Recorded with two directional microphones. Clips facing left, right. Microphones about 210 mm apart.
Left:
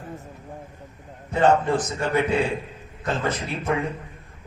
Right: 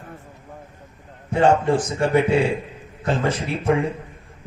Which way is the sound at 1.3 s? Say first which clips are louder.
Right 2 dB; 30° right (ahead or behind).